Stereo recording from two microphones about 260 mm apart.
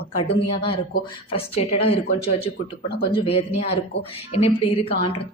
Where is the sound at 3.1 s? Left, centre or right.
Left.